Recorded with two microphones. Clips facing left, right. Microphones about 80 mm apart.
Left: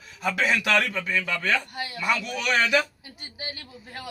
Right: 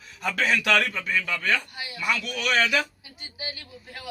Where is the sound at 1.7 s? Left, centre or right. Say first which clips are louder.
Left 4 dB; left.